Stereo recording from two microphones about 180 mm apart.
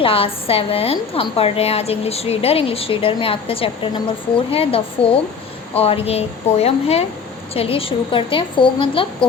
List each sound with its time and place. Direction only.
0.0 s a woman's voice: 30° left (ahead or behind)